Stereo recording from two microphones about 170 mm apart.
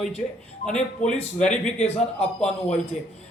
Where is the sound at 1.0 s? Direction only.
45° left (ahead or behind).